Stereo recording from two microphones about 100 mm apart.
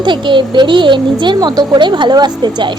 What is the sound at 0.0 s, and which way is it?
A woman's voice, 55° right (ahead or behind).